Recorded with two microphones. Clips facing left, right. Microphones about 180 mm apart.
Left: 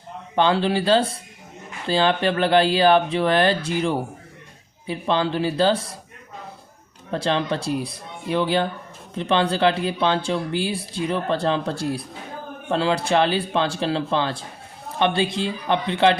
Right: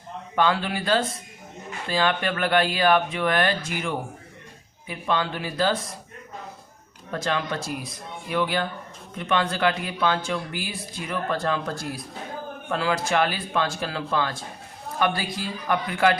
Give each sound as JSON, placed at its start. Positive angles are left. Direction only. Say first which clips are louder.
{"t": 0.3, "sound": "speech", "louder": "left 4 dB", "side_deg": 30}
{"t": 7.1, "sound": "speech", "louder": "left 4 dB", "side_deg": 30}